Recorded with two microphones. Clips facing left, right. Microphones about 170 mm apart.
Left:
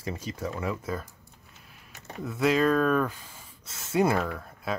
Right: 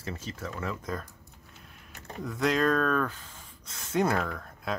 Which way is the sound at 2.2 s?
5° left (ahead or behind).